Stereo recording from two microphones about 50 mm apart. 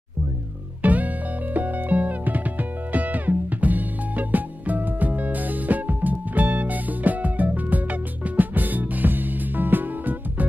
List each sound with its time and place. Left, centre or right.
0.8 s music: right